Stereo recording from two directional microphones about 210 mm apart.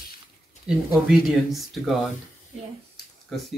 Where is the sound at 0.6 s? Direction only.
5° right (ahead or behind).